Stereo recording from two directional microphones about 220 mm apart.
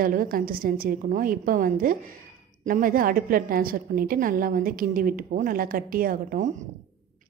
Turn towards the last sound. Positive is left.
turn(degrees=-40)  # may be behind; listen again after turning